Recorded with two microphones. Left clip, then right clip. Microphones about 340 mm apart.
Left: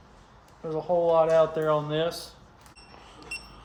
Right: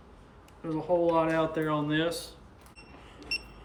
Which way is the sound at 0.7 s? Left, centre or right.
Centre.